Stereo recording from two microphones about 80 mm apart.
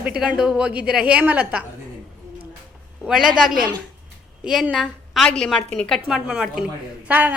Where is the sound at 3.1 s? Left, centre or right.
Centre.